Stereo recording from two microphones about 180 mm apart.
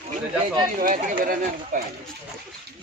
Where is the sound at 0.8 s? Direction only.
50° right (ahead or behind).